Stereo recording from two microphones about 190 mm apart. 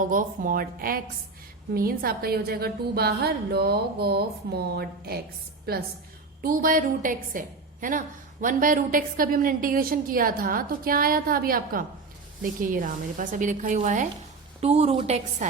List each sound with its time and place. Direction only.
0.1 s a woman's voice: 45° right (ahead or behind)